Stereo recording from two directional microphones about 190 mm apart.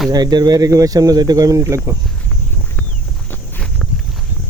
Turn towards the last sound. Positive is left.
turn(degrees=5)  # may be behind; listen again after turning